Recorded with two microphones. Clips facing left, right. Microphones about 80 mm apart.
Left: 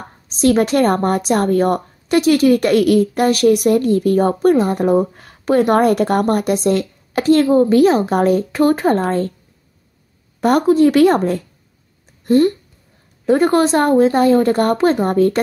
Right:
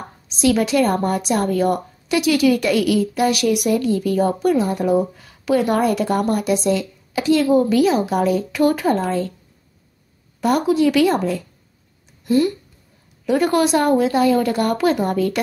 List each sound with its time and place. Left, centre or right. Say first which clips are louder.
0.3 s a woman's voice: left 3 dB; left
10.4 s a woman's voice: left 4 dB; left
12.3 s a woman's voice: left 4 dB; left